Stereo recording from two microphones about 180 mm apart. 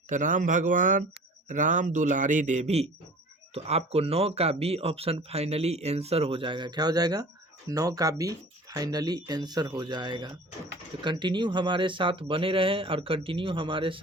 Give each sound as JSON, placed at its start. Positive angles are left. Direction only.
{"t": 0.1, "sound": "a man's voice", "side_deg": -45}